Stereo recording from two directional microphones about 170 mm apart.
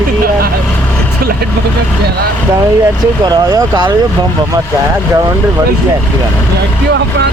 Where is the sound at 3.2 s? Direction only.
20° right (ahead or behind).